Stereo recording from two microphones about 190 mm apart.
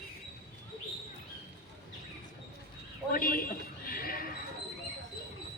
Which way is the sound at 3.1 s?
50° left (ahead or behind).